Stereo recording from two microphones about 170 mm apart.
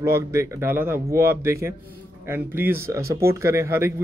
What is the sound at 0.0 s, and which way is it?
Speech, 15° right (ahead or behind).